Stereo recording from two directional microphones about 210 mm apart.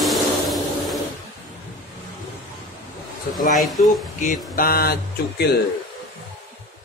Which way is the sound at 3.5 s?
Centre (ahead or behind).